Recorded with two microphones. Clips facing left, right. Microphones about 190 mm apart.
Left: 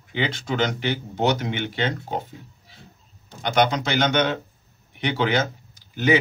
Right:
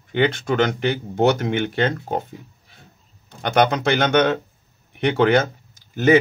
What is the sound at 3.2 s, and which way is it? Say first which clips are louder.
Speech: right 3 dB; 55° right (ahead or behind).